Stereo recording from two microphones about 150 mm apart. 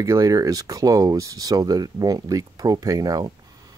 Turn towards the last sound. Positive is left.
turn(degrees=-25)  # may be behind; listen again after turning